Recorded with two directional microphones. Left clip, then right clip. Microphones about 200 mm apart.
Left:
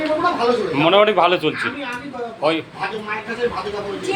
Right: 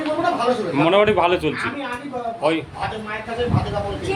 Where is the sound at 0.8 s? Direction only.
15° right (ahead or behind).